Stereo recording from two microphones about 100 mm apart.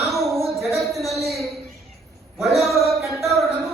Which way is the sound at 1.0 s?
90° right.